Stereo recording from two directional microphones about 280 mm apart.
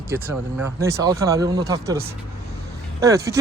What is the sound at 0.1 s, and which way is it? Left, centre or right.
Speech, centre.